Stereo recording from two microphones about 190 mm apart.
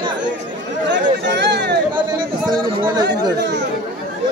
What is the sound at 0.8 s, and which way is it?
Chatter, 70° right (ahead or behind).